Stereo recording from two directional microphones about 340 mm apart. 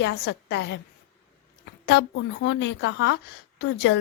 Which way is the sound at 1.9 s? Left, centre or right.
Left.